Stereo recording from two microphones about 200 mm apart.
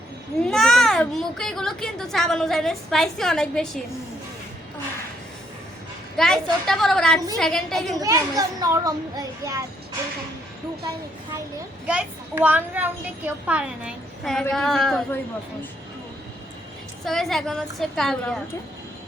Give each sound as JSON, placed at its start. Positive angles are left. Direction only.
{"t": 0.4, "sound": "a child's voice", "side_deg": 0}
{"t": 6.1, "sound": "a child's voice", "side_deg": 0}
{"t": 7.9, "sound": "a woman's voice", "side_deg": -15}
{"t": 11.9, "sound": "a woman's voice", "side_deg": -5}
{"t": 17.1, "sound": "a child's voice", "side_deg": 0}